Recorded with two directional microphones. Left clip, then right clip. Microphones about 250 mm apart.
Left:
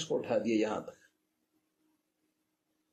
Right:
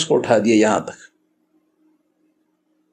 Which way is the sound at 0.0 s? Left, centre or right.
Right.